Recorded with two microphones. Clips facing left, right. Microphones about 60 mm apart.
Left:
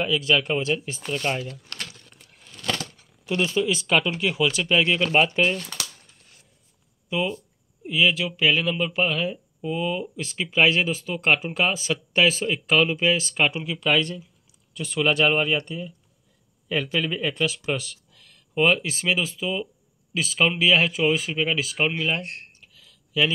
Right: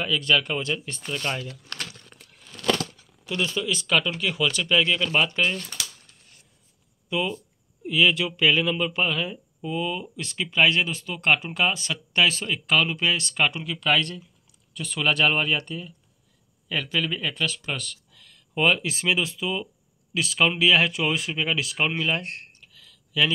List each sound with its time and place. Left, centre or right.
0.0 s speech: centre
3.3 s speech: left
7.1 s speech: centre
16.6 s speech: centre
22.7 s a sound: centre